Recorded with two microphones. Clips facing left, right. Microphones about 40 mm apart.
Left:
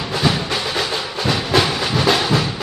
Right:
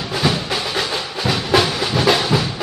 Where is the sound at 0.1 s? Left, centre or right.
Centre.